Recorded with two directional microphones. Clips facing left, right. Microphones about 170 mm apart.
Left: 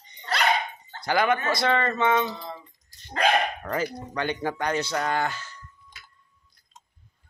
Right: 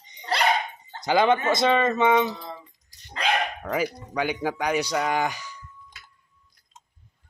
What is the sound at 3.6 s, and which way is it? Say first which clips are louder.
Speech: right 2 dB; 10° right (ahead or behind).